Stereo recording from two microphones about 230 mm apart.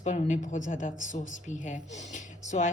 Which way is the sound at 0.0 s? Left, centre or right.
Left.